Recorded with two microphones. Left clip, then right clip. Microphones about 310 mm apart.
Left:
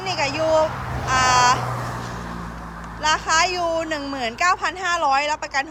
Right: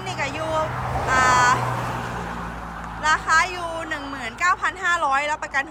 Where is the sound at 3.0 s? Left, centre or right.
Centre.